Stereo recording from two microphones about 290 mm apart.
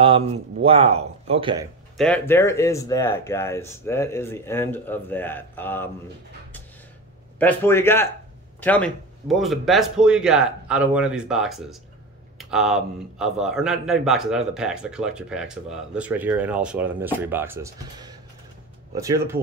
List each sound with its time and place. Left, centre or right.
0.0 s speech: centre
2.0 s speech: centre
7.3 s a man's voice: centre